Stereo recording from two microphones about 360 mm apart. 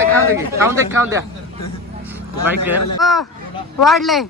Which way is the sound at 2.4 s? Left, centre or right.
Centre.